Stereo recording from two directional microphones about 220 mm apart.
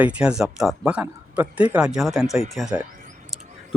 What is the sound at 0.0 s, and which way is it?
Speech, 5° right (ahead or behind).